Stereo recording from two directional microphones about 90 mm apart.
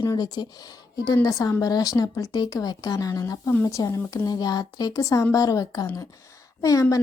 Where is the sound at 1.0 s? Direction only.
40° left (ahead or behind).